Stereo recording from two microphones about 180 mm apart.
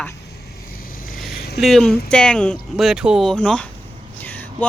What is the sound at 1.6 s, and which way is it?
Speech, centre (ahead or behind).